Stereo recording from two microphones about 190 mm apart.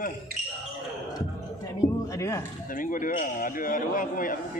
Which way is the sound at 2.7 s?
45° left (ahead or behind).